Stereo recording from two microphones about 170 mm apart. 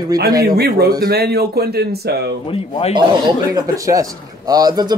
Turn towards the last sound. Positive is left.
turn(degrees=-25)  # may be behind; listen again after turning